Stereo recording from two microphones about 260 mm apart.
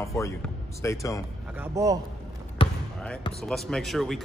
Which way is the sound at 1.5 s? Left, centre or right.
Centre.